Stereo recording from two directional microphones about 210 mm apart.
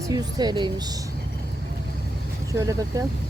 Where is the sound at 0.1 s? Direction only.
20° right (ahead or behind).